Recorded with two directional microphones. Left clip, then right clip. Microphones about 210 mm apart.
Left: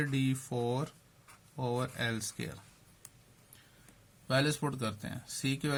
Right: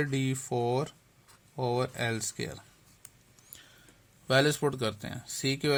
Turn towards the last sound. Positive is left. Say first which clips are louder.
# right 6 dB
turn(degrees=-30)  # may be behind; listen again after turning